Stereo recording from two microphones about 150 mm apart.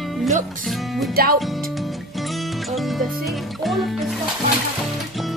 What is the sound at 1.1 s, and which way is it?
Speech, 85° right.